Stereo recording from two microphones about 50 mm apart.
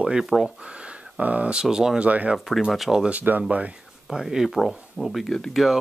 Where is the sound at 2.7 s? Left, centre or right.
Centre.